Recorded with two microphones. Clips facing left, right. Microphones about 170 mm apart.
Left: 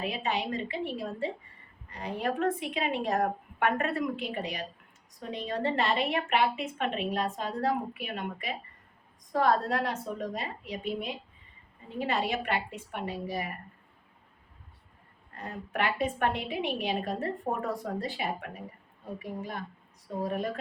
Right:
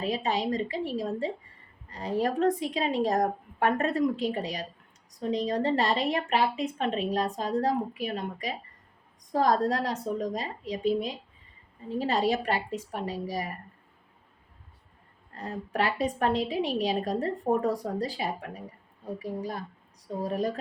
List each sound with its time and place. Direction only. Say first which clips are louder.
0.0 s a woman's voice: right 3 dB; 35° right (ahead or behind)
15.4 s a woman's voice: right 3 dB; 35° right (ahead or behind)